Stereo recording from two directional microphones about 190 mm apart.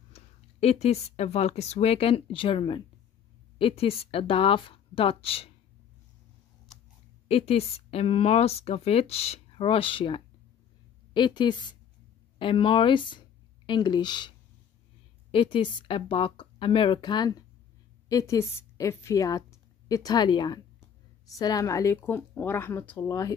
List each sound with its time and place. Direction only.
0.1 s speech: 35° left (ahead or behind)
7.2 s speech: 30° left (ahead or behind)
15.3 s speech: 25° left (ahead or behind)